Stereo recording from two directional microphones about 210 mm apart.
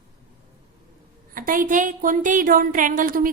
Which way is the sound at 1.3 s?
40° right (ahead or behind).